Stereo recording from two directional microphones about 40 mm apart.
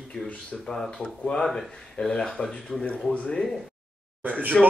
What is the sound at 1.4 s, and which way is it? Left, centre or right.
Speech, centre.